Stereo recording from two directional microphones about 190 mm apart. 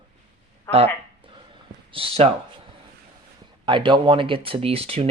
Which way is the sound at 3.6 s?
25° right (ahead or behind).